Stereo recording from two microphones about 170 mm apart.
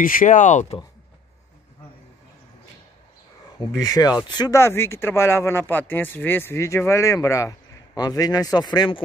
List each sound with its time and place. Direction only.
0.0 s speech: 55° left (ahead or behind)
3.5 s speech: 20° left (ahead or behind)